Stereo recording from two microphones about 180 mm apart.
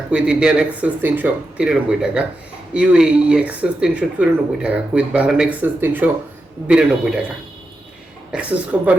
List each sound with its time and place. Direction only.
0.1 s speech: 5° right (ahead or behind)
8.3 s speech: 5° right (ahead or behind)